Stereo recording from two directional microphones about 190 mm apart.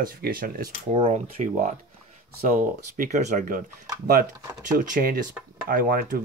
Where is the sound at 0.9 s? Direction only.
35° right (ahead or behind).